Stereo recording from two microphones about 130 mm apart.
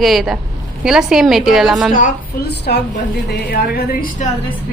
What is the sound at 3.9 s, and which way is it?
Speech, 90° left.